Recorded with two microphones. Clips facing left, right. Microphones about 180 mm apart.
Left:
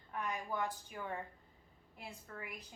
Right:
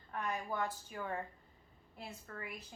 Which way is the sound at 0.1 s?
15° left (ahead or behind).